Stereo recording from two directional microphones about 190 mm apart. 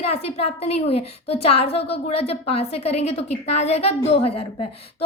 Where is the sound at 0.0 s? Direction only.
30° left (ahead or behind).